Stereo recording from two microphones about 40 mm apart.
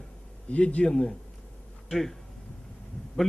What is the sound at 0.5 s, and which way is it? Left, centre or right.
Speech, left.